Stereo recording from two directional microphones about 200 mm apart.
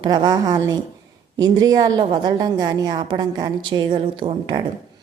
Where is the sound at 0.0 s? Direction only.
20° right (ahead or behind).